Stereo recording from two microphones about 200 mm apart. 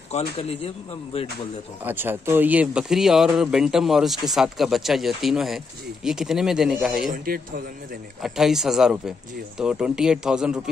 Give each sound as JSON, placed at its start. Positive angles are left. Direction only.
{"t": 0.1, "sound": "speech", "side_deg": 30}
{"t": 1.9, "sound": "speech", "side_deg": -10}
{"t": 7.1, "sound": "a man's voice", "side_deg": -45}
{"t": 8.2, "sound": "speech", "side_deg": 0}